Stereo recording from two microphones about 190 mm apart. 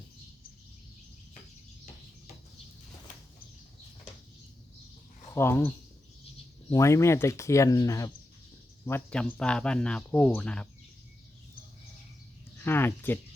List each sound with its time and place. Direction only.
5.3 s speech: 10° left (ahead or behind)
12.5 s speech: 10° left (ahead or behind)